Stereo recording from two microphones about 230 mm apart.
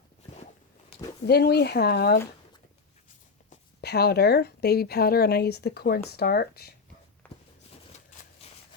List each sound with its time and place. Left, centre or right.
1.3 s speech: left
3.8 s speech: left
7.2 s a sound: centre
8.4 s shuffling cards: left